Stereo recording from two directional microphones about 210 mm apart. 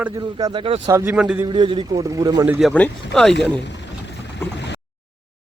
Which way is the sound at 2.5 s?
5° left (ahead or behind).